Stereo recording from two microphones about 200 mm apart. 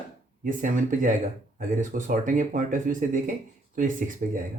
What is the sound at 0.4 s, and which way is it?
Speech, 40° right (ahead or behind).